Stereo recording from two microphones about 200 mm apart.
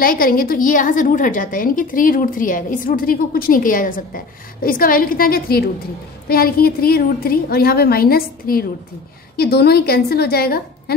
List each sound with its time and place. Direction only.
0.0 s a woman's voice: 45° left (ahead or behind)